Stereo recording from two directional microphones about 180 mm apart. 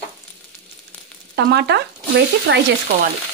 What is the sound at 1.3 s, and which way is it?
Speech, 70° right (ahead or behind).